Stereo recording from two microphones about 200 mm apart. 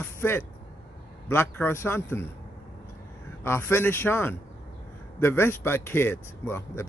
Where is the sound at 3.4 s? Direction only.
10° left (ahead or behind).